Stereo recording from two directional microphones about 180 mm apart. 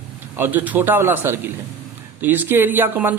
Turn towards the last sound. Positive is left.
turn(degrees=-10)  # may be behind; listen again after turning